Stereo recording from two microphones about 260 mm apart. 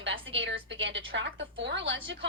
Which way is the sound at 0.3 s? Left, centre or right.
Right.